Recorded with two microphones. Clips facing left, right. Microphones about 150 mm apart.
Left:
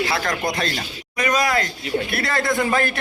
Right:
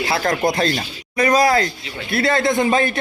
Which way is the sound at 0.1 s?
30° right (ahead or behind).